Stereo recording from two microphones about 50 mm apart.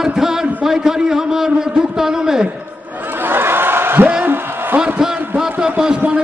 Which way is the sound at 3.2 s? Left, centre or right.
Right.